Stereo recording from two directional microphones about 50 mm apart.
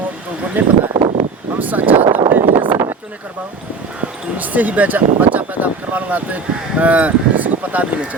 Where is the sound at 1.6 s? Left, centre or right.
Right.